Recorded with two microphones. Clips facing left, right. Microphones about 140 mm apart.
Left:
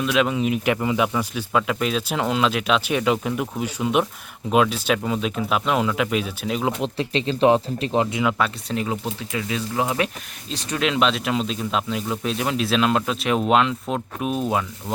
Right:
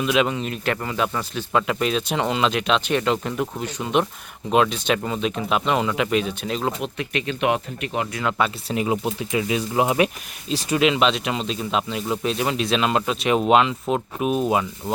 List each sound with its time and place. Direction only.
0.0 s speech: centre (ahead or behind)
6.8 s speech: 30° left (ahead or behind)
8.2 s speech: centre (ahead or behind); by 10.1 s 15° right (ahead or behind)
10.5 s speech: 5° right (ahead or behind)